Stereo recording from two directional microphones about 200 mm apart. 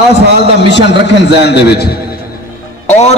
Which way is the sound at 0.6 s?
60° left (ahead or behind).